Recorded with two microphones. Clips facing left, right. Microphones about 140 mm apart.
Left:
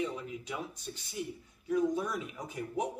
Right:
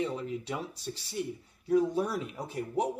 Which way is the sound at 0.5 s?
30° right (ahead or behind).